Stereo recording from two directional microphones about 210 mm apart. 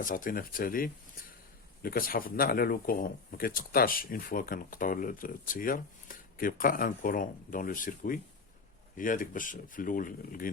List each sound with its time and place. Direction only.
0.0 s speech: 40° left (ahead or behind)